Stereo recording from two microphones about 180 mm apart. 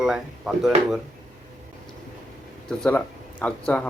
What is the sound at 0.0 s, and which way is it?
Speech, 5° right (ahead or behind).